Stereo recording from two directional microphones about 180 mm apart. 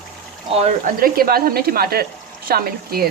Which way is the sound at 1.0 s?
55° right (ahead or behind).